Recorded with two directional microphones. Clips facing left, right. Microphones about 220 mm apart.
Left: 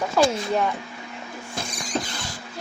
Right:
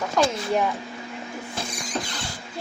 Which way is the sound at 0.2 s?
5° left (ahead or behind).